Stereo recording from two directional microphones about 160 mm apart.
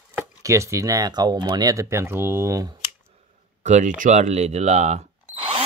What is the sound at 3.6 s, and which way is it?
Speech, 50° right (ahead or behind).